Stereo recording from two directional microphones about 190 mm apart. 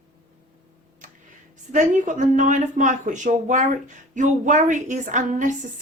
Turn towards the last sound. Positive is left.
turn(degrees=-40)  # may be behind; listen again after turning